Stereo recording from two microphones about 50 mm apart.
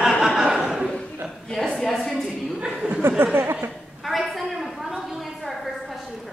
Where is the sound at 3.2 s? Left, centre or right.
Right.